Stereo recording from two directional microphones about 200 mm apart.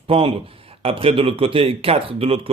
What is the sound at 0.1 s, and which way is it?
A man's voice, 30° right (ahead or behind).